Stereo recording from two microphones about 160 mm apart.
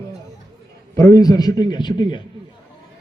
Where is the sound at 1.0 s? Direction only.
25° left (ahead or behind).